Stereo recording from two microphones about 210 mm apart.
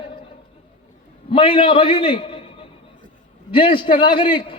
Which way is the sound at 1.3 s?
25° left (ahead or behind).